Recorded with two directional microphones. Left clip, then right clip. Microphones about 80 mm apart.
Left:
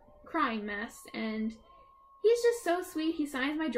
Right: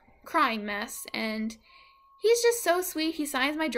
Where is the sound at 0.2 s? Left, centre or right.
Right.